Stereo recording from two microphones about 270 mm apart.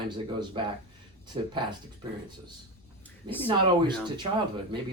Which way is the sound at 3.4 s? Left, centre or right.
Centre.